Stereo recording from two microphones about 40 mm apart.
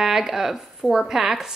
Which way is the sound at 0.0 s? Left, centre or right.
Centre.